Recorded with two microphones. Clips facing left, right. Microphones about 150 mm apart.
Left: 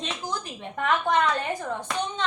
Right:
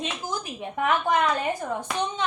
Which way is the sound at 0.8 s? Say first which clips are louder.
Right 1 dB; 10° right (ahead or behind).